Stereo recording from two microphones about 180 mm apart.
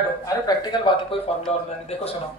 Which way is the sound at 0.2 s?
20° left (ahead or behind).